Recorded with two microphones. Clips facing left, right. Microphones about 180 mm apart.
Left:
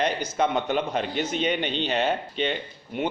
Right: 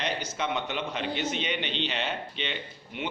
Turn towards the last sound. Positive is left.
turn(degrees=45)  # may be behind; listen again after turning